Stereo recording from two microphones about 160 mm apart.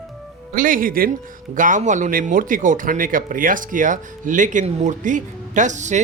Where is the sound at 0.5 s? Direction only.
60° right (ahead or behind).